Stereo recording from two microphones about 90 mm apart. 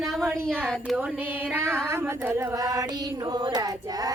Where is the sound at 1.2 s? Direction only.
20° right (ahead or behind).